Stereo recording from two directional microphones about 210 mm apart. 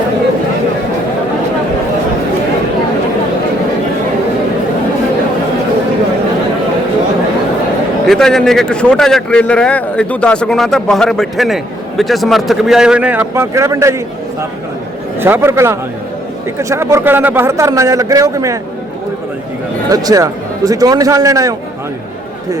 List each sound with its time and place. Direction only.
8.0 s a man's voice: centre (ahead or behind); by 13.9 s 15° right (ahead or behind)
15.2 s a man's voice: 10° right (ahead or behind)
19.9 s a man's voice: 15° right (ahead or behind)